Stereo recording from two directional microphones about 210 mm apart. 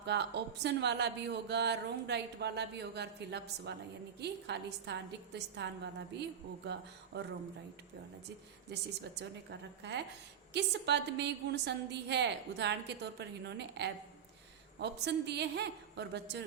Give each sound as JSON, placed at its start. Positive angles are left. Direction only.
{"t": 0.0, "sound": "a woman's voice", "side_deg": -55}
{"t": 8.7, "sound": "a woman's voice", "side_deg": -55}